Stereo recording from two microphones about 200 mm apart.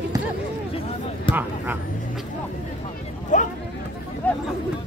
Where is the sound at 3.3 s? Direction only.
40° left (ahead or behind).